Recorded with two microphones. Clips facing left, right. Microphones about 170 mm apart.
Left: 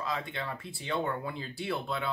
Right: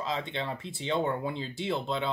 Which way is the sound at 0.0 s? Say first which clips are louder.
Right 2 dB; 25° right (ahead or behind).